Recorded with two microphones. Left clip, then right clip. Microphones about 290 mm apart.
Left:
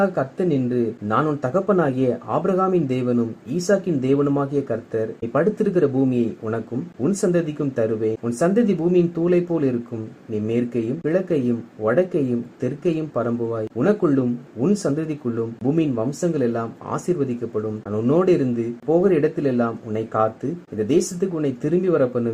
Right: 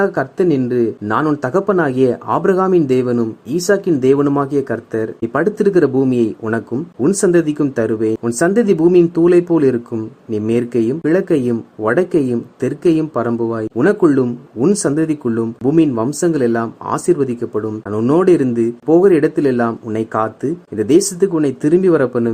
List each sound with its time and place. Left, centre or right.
0.0 s speech: right